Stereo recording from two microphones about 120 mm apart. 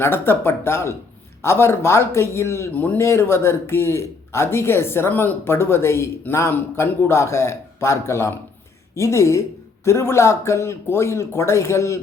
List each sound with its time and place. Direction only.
0.0 s speech: 20° left (ahead or behind)